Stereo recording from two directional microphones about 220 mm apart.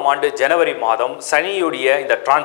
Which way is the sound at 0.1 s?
15° left (ahead or behind).